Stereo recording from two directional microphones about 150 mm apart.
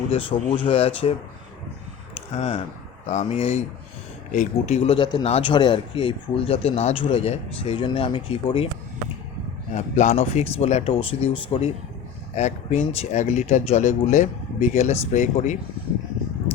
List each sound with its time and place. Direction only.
0.1 s speech: 35° left (ahead or behind)
2.3 s speech: 45° left (ahead or behind)
9.7 s speech: 50° left (ahead or behind)